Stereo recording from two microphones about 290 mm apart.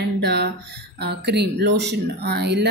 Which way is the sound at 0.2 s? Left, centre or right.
Right.